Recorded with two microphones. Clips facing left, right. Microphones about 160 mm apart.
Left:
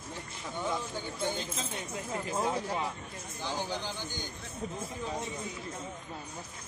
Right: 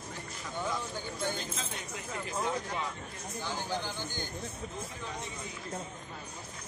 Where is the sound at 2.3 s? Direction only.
30° left (ahead or behind).